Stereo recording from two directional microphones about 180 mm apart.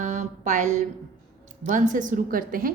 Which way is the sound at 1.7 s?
45° right (ahead or behind).